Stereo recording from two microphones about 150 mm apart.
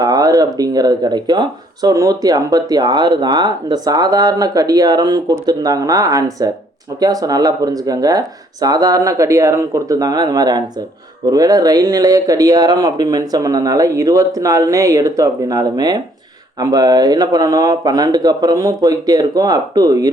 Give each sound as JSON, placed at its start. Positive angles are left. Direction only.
{"t": 0.0, "sound": "speech", "side_deg": -25}